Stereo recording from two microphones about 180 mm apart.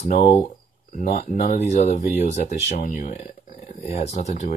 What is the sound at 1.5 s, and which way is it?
Speech, 40° left (ahead or behind).